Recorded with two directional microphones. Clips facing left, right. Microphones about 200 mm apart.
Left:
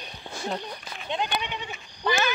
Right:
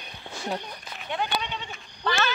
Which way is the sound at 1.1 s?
20° left (ahead or behind).